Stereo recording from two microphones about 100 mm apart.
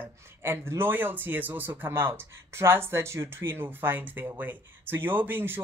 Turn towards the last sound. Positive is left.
turn(degrees=-20)  # may be behind; listen again after turning